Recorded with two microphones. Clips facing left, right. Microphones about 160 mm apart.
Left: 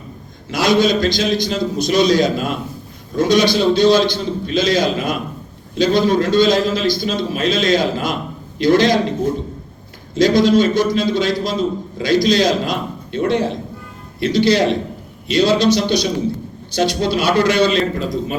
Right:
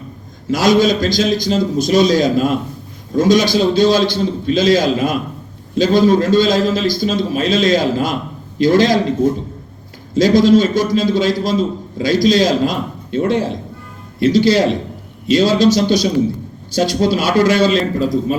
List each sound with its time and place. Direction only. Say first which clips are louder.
0.5 s a man's voice: right 2 dB; 45° right (ahead or behind)
10.2 s a man's voice: right 2 dB; 45° right (ahead or behind)